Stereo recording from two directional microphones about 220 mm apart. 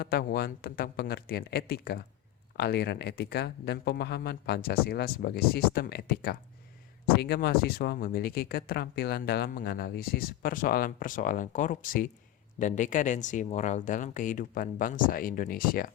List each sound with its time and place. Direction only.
0.0 s speech: 45° left (ahead or behind)